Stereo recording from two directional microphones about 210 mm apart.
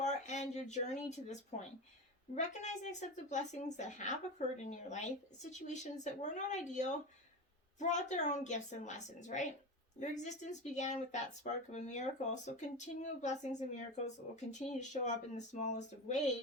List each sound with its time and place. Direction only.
0.0 s speech: 35° left (ahead or behind)